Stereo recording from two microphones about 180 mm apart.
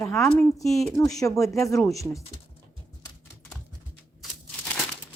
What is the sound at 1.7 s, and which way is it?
Speech, centre (ahead or behind).